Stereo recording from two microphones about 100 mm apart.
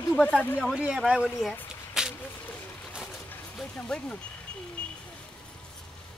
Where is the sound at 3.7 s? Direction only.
10° left (ahead or behind).